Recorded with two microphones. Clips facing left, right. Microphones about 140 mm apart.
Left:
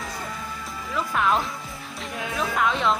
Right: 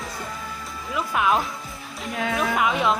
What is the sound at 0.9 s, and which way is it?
Speech, 5° right (ahead or behind).